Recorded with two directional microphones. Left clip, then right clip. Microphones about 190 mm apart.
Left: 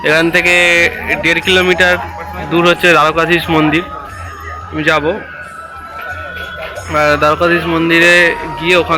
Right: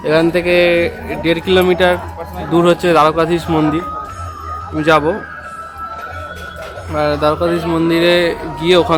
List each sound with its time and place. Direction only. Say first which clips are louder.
0.0 s speech: left 3 dB; 15° right (ahead or behind)
2.8 s speech: left 2 dB; 10° right (ahead or behind)
6.9 s speech: left 4 dB; 5° right (ahead or behind); by 9.0 s 30° right (ahead or behind)